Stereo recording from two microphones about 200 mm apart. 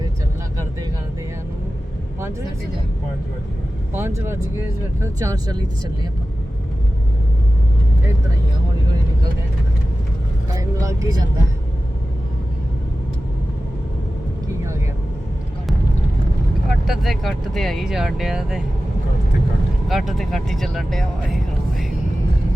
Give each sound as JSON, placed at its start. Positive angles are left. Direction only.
{"t": 3.9, "sound": "speech", "side_deg": -10}
{"t": 10.5, "sound": "speech", "side_deg": -15}
{"t": 16.6, "sound": "speech", "side_deg": 0}
{"t": 19.9, "sound": "speech", "side_deg": 0}